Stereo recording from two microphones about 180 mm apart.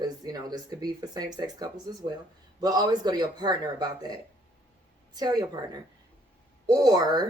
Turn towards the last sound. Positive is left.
turn(degrees=-20)  # may be behind; listen again after turning